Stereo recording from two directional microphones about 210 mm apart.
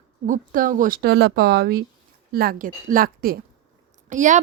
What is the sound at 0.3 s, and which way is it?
A woman's voice, 40° right (ahead or behind).